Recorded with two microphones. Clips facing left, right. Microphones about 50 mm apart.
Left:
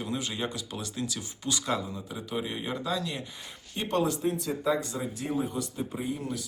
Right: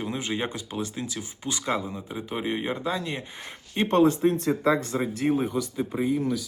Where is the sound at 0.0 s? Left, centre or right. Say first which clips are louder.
Right 3 dB; right.